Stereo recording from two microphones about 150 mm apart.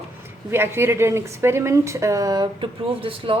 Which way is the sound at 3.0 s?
35° right (ahead or behind).